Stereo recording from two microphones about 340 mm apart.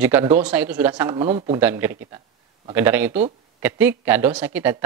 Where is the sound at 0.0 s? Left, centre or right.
Centre.